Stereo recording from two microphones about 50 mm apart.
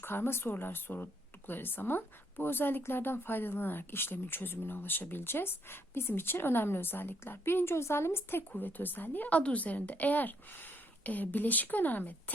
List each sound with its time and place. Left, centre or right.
0.0 s speech: left
8.5 s a woman's voice: left